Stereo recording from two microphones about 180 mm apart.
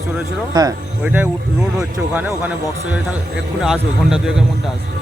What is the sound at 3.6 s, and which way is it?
Speech, 5° right (ahead or behind).